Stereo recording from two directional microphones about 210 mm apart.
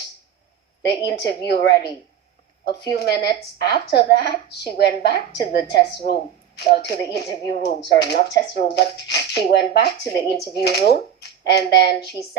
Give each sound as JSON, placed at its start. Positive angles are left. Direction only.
{"t": 0.9, "sound": "a woman's voice", "side_deg": 50}
{"t": 3.0, "sound": "a woman's voice", "side_deg": 50}